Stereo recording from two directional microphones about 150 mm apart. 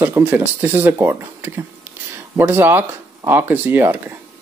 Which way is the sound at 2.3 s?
15° right (ahead or behind).